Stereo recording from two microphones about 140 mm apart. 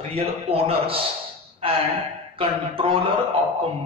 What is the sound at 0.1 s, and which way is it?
Speech, 45° right (ahead or behind).